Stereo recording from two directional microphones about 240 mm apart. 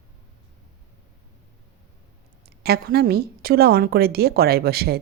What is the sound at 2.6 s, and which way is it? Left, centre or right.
Speech, right.